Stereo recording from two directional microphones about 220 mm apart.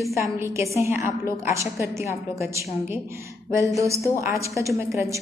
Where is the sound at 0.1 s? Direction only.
10° right (ahead or behind).